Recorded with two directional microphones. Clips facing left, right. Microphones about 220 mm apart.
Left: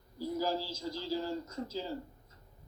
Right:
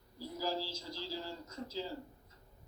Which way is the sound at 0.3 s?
45° left (ahead or behind).